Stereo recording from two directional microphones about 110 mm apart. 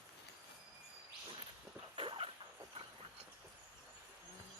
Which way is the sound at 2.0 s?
55° right (ahead or behind).